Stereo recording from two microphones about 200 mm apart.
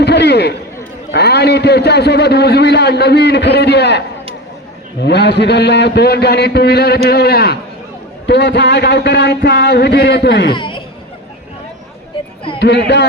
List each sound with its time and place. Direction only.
0.0 s a man's voice: 55° left (ahead or behind)
10.5 s speech: 25° left (ahead or behind)
12.5 s a man's voice: 60° left (ahead or behind)